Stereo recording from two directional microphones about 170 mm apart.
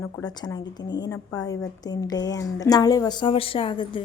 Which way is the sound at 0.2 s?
25° left (ahead or behind).